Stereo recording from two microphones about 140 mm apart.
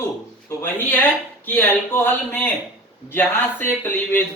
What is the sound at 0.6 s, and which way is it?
A man's voice, 15° left (ahead or behind).